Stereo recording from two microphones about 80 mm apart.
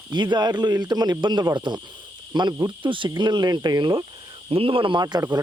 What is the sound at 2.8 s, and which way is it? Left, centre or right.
Speech, right.